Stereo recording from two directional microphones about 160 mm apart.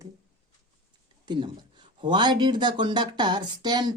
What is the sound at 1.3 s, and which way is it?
Speech, 30° right (ahead or behind).